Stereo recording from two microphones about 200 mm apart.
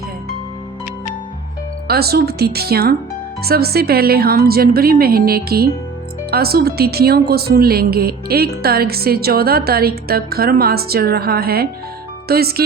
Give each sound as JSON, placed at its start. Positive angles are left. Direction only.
{"t": 1.9, "sound": "a woman's voice", "side_deg": -50}